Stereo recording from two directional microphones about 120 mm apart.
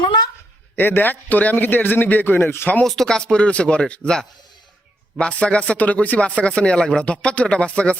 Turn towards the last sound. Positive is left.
turn(degrees=10)  # may be behind; listen again after turning